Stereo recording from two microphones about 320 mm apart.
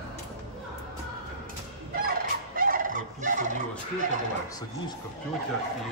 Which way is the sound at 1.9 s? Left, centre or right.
Right.